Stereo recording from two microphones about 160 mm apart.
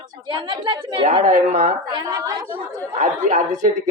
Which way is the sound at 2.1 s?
15° right (ahead or behind).